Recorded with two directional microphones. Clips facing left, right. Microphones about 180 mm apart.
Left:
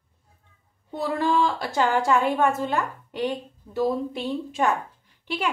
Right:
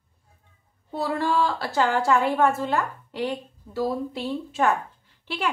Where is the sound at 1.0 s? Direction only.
15° left (ahead or behind).